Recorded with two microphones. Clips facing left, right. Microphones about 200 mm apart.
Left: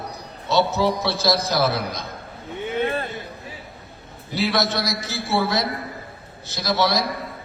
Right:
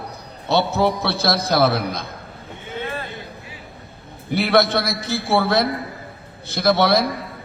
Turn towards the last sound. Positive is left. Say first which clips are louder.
# right 5 dB
turn(degrees=-60)  # may be behind; listen again after turning